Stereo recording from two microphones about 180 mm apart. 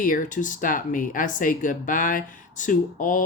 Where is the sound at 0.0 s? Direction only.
45° left (ahead or behind).